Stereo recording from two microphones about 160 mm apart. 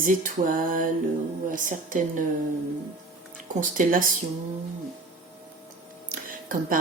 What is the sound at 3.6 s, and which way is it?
Speech, 60° right (ahead or behind).